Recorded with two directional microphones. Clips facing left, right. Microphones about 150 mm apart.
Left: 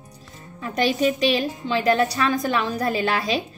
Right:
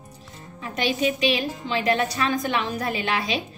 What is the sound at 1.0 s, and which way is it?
A woman's voice, 45° left (ahead or behind).